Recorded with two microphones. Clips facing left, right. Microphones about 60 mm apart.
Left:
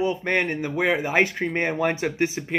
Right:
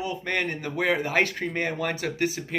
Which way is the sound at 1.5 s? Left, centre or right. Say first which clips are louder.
Left 5 dB; left.